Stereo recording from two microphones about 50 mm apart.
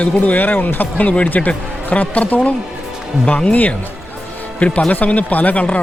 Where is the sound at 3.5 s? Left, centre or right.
Left.